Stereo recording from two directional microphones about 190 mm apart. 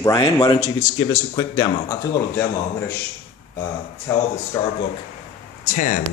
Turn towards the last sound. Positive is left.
turn(degrees=40)  # may be behind; listen again after turning